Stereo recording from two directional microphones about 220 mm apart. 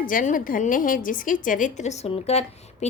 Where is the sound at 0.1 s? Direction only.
40° left (ahead or behind).